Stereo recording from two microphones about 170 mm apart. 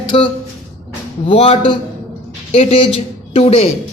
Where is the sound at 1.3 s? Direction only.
30° left (ahead or behind).